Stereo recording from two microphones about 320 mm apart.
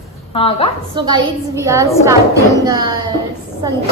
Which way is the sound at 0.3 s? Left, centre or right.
Centre.